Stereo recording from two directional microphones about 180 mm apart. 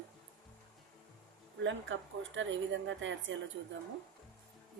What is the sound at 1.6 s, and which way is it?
A woman's voice, 90° right.